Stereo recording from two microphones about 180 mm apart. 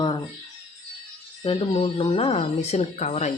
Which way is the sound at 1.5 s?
35° left (ahead or behind).